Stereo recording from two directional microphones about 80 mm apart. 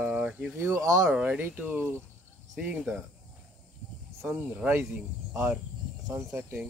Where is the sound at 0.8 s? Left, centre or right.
Right.